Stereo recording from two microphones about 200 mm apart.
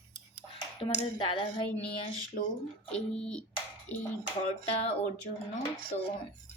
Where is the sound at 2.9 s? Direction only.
5° left (ahead or behind).